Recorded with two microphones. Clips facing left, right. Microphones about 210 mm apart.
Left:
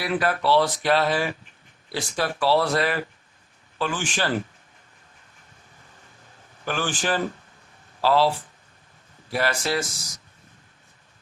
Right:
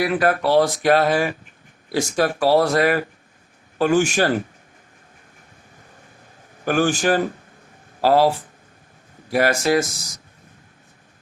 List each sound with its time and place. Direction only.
0.0 s speech: 50° right (ahead or behind)
6.7 s speech: 45° right (ahead or behind)